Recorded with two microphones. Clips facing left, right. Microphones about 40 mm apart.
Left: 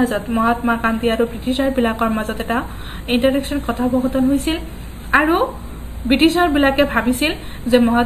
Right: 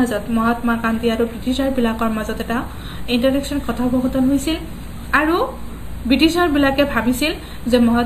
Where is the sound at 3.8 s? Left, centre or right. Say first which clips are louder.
Even; left.